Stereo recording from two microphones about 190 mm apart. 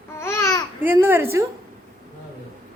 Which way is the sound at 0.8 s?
10° right (ahead or behind).